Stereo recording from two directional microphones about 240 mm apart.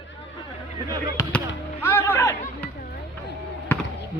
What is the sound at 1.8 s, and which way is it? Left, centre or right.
Chatter, centre.